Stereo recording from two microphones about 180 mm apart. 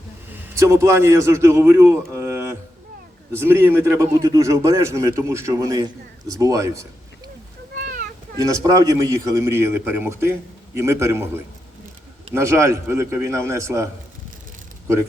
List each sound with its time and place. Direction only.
0.5 s a man's voice: 15° right (ahead or behind)
8.4 s a man's voice: 20° right (ahead or behind)
12.3 s a man's voice: 15° right (ahead or behind)